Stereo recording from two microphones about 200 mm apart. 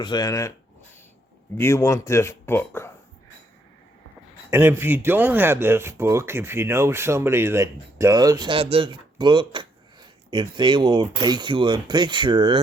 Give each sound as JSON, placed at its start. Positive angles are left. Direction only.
{"t": 0.0, "sound": "speech", "side_deg": 20}
{"t": 1.5, "sound": "speech", "side_deg": 15}
{"t": 4.5, "sound": "speech", "side_deg": -10}